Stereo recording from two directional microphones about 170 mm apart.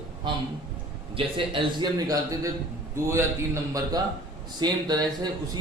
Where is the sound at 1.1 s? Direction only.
30° right (ahead or behind).